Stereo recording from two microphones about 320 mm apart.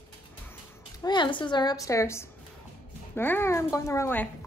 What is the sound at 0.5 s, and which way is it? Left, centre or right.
Speech, centre.